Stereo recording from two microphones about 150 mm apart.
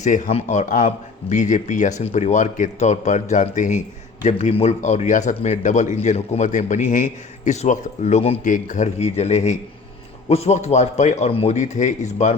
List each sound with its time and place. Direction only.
0.0 s speech: 50° left (ahead or behind)